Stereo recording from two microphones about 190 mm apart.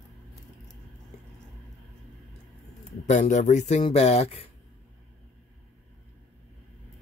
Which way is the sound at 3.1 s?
40° left (ahead or behind).